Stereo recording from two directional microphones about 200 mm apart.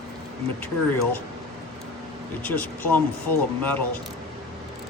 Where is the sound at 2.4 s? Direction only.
10° left (ahead or behind).